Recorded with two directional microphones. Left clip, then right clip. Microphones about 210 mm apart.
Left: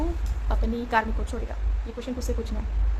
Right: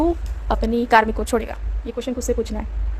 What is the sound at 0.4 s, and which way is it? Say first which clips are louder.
Speech: right 11 dB; 40° right (ahead or behind).